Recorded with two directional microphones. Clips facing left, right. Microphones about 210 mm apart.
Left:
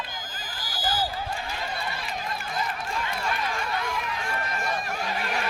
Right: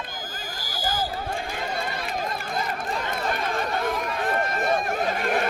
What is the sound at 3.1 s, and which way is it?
Run, 50° right (ahead or behind).